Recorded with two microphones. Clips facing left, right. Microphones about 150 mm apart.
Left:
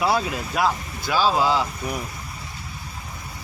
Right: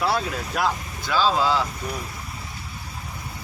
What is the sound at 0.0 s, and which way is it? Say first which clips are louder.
Speech: left 2 dB; 5° left (ahead or behind).